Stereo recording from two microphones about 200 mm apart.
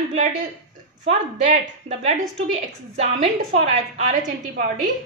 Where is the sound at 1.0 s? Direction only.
35° right (ahead or behind).